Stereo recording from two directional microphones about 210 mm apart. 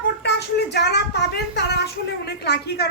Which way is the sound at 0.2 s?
55° left (ahead or behind).